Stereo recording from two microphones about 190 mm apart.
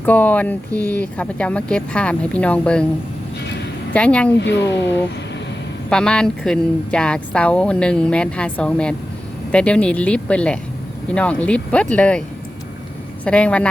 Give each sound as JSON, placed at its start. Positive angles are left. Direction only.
{"t": 0.0, "sound": "speech", "side_deg": 10}
{"t": 3.9, "sound": "speech", "side_deg": 5}
{"t": 4.4, "sound": "speech", "side_deg": 65}
{"t": 5.9, "sound": "speech", "side_deg": 5}
{"t": 13.2, "sound": "speech", "side_deg": 5}